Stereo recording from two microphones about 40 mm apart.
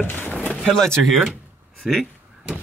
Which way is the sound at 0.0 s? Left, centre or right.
Left.